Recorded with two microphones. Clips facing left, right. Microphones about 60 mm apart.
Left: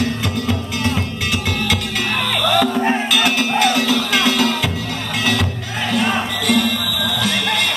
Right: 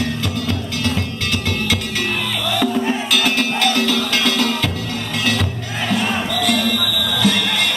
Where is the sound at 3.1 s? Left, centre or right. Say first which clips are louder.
Left 1 dB; centre.